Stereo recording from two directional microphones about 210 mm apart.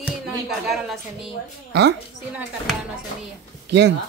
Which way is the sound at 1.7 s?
55° right (ahead or behind).